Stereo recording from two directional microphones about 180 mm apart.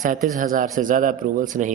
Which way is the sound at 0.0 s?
45° right (ahead or behind).